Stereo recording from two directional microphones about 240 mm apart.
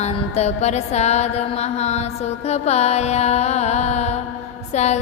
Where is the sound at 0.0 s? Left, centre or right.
Left.